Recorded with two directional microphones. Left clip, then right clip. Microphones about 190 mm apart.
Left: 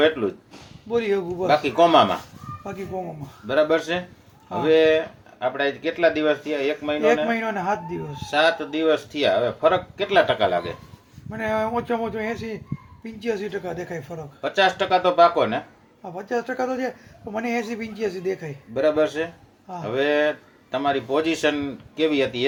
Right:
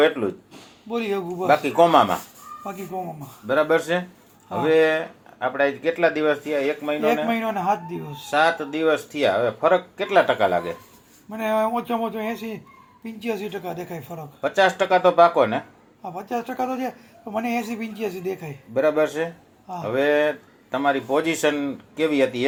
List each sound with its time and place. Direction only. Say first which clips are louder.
0.2 s speech: left 1 dB; 20° right (ahead or behind)
0.9 s speech: left 3 dB; 15° left (ahead or behind)
1.5 s speech: right 1 dB; 20° right (ahead or behind)
2.6 s speech: even; 10° left (ahead or behind)
3.4 s speech: even; 15° right (ahead or behind)
7.3 s speech: right 1 dB; 10° left (ahead or behind)
8.3 s speech: even; 20° right (ahead or behind)
11.3 s speech: right 2 dB; 10° left (ahead or behind)
14.4 s speech: right 1 dB; 15° right (ahead or behind)
16.0 s speech: left 1 dB; 10° left (ahead or behind)
18.7 s speech: even; 15° right (ahead or behind)